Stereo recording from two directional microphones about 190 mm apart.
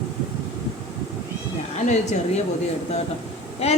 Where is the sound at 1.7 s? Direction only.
35° left (ahead or behind).